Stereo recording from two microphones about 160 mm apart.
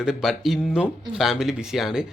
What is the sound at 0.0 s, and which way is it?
A man's voice, centre (ahead or behind).